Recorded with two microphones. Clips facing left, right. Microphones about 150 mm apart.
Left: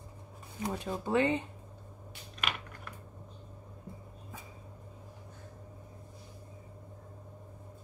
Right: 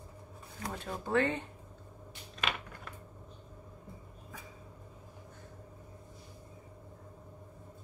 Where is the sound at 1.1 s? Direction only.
15° left (ahead or behind).